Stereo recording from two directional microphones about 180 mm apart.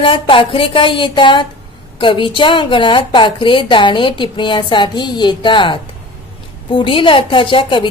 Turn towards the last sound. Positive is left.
turn(degrees=25)  # may be behind; listen again after turning